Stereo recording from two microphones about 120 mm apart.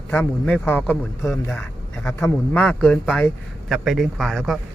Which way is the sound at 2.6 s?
10° left (ahead or behind).